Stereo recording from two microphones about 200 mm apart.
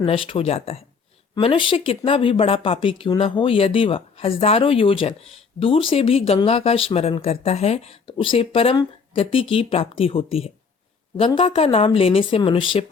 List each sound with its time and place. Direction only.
0.0 s speech: 30° left (ahead or behind)